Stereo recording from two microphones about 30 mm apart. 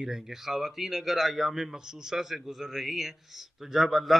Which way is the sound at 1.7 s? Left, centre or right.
Centre.